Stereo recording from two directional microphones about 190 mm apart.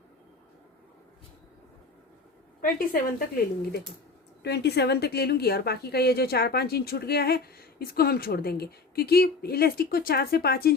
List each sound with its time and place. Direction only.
2.6 s a woman's voice: 50° left (ahead or behind)
4.4 s a woman's voice: 60° left (ahead or behind)